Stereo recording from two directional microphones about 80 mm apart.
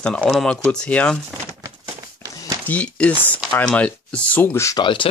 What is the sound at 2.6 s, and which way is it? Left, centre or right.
Speech, centre.